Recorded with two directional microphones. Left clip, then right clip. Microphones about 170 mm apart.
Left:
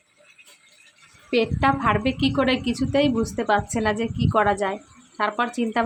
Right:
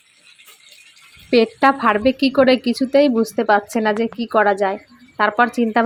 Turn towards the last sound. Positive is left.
turn(degrees=-30)  # may be behind; listen again after turning